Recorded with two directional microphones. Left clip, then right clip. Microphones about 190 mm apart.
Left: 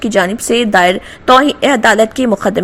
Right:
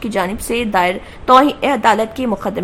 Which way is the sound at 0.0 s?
20° left (ahead or behind).